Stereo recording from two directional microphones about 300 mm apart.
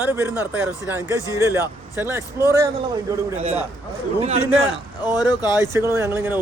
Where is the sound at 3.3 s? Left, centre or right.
Right.